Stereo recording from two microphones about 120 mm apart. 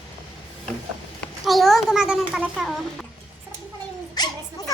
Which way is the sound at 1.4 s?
Centre (ahead or behind).